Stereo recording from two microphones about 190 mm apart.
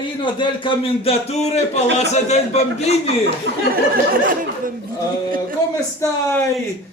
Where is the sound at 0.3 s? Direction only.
25° left (ahead or behind).